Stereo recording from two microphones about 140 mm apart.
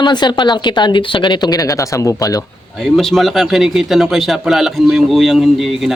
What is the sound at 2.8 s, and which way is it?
A man's voice, centre (ahead or behind).